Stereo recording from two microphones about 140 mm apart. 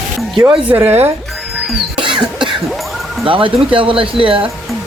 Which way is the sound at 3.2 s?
40° right (ahead or behind).